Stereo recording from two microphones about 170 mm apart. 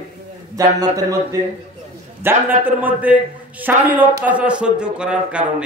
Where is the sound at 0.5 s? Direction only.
20° right (ahead or behind).